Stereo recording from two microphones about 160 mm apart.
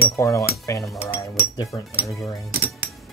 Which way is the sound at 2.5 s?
10° right (ahead or behind).